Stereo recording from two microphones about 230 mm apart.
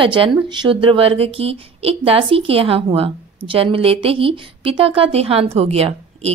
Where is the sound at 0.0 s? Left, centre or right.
Right.